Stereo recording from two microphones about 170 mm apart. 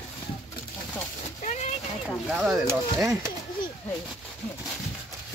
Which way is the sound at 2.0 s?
Centre (ahead or behind).